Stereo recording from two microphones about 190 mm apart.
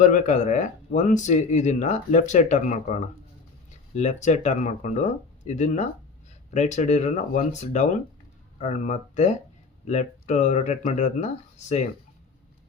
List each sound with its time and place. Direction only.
0.0 s speech: 40° left (ahead or behind)